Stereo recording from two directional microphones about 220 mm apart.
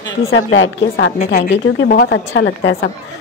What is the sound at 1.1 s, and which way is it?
Speech, 30° left (ahead or behind).